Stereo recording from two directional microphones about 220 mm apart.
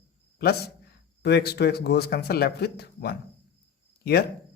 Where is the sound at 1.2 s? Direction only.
45° left (ahead or behind).